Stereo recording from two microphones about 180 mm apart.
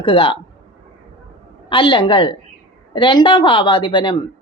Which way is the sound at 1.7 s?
30° left (ahead or behind).